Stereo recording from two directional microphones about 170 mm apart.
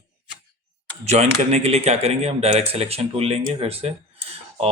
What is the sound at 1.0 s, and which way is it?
Speech, 40° right (ahead or behind).